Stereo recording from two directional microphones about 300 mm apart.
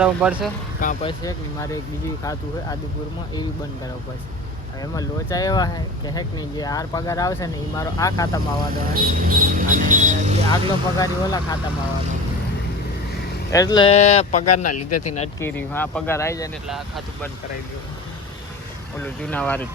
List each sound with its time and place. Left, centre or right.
0.0 s speech: centre
0.8 s speech: left
1.2 s speech: centre
4.8 s speech: centre
8.7 s speech: right
10.5 s speech: centre
13.5 s speech: centre
14.7 s speech: left
15.0 s speech: left
15.4 s speech: centre
16.6 s speech: centre
18.9 s speech: centre